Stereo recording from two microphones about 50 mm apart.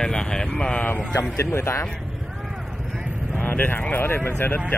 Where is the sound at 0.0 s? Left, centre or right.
Centre.